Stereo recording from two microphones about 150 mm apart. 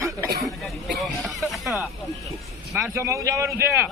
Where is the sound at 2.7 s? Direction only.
20° right (ahead or behind).